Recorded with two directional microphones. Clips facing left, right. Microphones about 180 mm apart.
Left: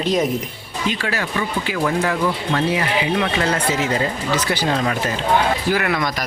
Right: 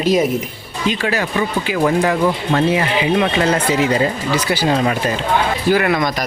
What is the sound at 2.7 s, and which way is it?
Speech, 20° right (ahead or behind).